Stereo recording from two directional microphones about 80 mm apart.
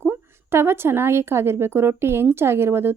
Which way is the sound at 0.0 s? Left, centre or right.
Right.